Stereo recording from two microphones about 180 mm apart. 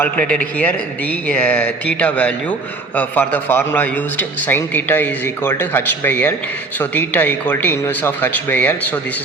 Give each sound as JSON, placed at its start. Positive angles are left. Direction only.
{"t": 0.0, "sound": "a man's voice", "side_deg": 10}